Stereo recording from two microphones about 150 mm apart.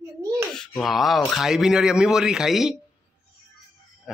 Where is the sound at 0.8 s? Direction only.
Centre (ahead or behind).